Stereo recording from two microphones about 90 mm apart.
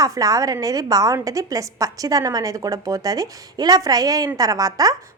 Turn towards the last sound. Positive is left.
turn(degrees=-40)  # may be behind; listen again after turning